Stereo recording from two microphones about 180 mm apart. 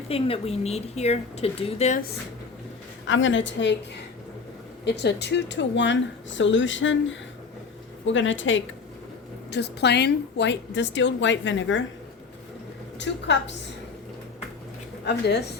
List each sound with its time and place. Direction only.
0.1 s speech: 35° left (ahead or behind)
3.1 s speech: 90° left
4.9 s speech: 70° left (ahead or behind); by 8.6 s 90° left
9.5 s a woman's voice: 70° left (ahead or behind); by 11.8 s 90° left
13.0 s a woman's voice: 80° left
15.0 s a woman's voice: 70° left (ahead or behind)